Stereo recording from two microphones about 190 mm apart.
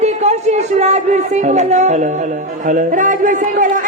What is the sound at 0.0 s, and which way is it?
Music, 35° right (ahead or behind).